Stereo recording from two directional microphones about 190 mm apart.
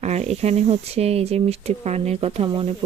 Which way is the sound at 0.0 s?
35° right (ahead or behind).